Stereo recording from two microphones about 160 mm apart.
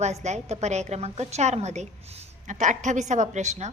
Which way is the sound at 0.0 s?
45° right (ahead or behind).